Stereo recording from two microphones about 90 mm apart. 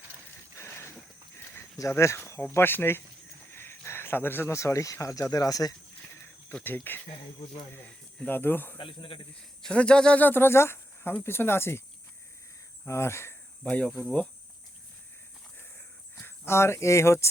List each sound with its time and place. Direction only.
0.5 s a sound: 30° left (ahead or behind)
1.8 s speech: 30° left (ahead or behind)
6.9 s speech: 20° left (ahead or behind)
8.8 s speech: 70° left (ahead or behind)
9.6 s speech: 10° left (ahead or behind); by 11.8 s 25° left (ahead or behind)
12.9 s speech: 30° left (ahead or behind)
13.7 s cricket: 15° left (ahead or behind)
16.1 s speech: 30° left (ahead or behind)